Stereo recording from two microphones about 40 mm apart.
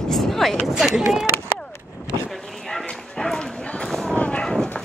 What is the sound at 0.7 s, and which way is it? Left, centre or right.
Speech, centre.